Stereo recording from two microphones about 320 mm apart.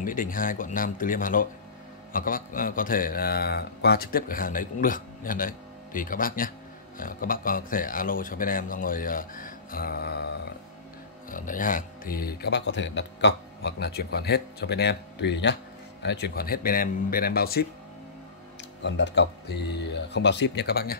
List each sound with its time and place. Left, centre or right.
0.0 s a man's voice: left
18.8 s speech: left